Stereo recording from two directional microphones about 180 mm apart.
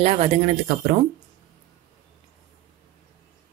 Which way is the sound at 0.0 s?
35° right (ahead or behind).